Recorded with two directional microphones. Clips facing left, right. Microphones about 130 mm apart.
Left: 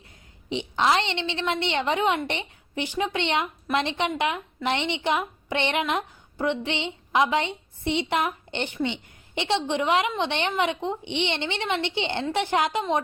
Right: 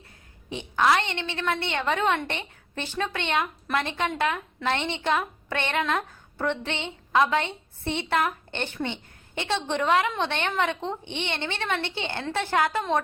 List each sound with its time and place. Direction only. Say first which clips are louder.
0.5 s a woman's voice: even; 20° left (ahead or behind)